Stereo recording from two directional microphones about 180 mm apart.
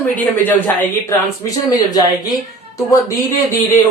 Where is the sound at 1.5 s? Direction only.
20° left (ahead or behind).